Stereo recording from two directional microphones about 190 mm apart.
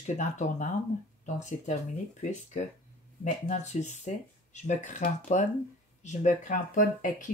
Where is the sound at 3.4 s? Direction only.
40° left (ahead or behind).